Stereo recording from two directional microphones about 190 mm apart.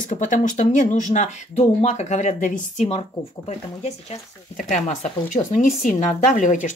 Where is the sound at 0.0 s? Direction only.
40° left (ahead or behind).